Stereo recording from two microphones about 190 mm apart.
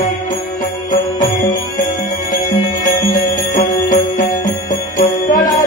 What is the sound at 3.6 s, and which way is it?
Music, 40° left (ahead or behind).